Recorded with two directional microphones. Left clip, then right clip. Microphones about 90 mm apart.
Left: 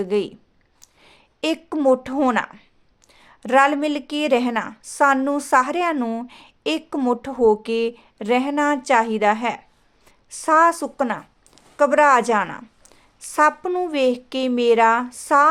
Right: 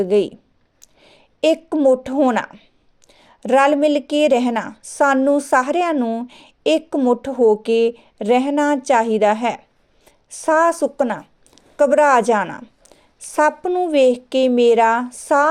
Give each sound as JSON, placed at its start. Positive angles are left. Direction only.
{"t": 0.0, "sound": "speech", "side_deg": -35}
{"t": 0.8, "sound": "a sound", "side_deg": -30}
{"t": 3.1, "sound": "speech", "side_deg": -35}
{"t": 6.0, "sound": "speech", "side_deg": -15}
{"t": 6.2, "sound": "a woman's voice", "side_deg": -35}